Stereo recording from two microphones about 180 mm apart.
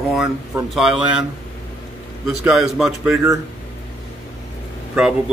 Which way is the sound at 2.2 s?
Centre (ahead or behind).